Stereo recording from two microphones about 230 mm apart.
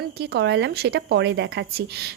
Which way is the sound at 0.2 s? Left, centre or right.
Right.